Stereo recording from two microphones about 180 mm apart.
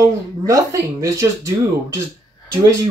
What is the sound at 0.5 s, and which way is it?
Speech, 20° right (ahead or behind).